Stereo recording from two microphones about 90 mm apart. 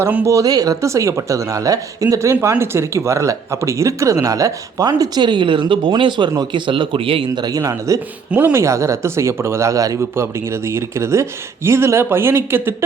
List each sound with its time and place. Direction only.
0.3 s a man's voice: 40° right (ahead or behind); by 7.3 s 85° right
7.3 s speech: 45° right (ahead or behind)
8.3 s speech: 15° right (ahead or behind)
8.5 s speech: 35° right (ahead or behind)
10.2 s speech: 30° right (ahead or behind)